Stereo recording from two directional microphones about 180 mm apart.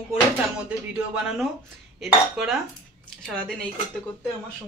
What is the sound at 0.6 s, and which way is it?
Speech, 5° right (ahead or behind).